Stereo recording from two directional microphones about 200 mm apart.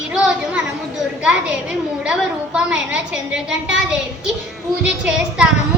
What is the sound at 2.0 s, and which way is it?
A woman's voice, 5° right (ahead or behind).